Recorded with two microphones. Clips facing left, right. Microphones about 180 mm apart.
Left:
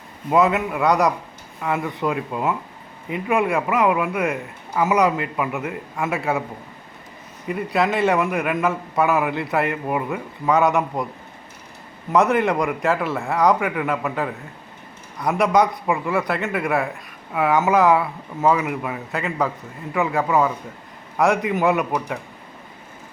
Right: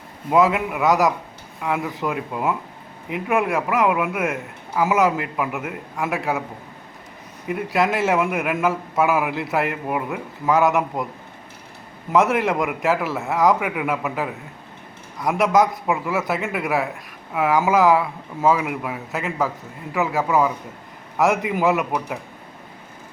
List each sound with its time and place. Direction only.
0.3 s a man's voice: 5° right (ahead or behind)
7.4 s a man's voice: centre (ahead or behind)
12.1 s a man's voice: centre (ahead or behind)